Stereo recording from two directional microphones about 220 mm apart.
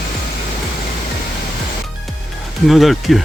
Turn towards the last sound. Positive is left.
turn(degrees=0)  # may be behind; listen again after turning